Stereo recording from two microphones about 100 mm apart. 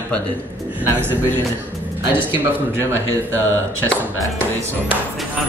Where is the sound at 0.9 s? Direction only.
20° right (ahead or behind).